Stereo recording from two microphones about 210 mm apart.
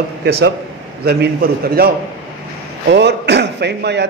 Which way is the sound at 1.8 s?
45° right (ahead or behind).